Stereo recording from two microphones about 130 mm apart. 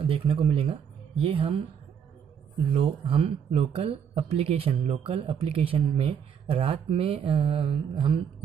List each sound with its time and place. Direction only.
0.0 s speech: 45° right (ahead or behind)
2.7 s speech: 45° right (ahead or behind)